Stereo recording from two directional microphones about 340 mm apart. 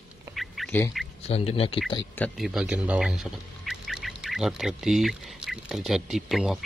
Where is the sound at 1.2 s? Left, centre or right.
Centre.